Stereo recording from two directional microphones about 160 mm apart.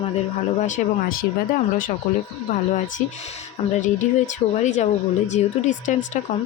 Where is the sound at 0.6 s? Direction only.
50° left (ahead or behind).